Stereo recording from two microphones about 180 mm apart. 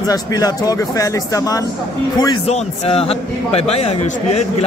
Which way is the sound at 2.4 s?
35° left (ahead or behind).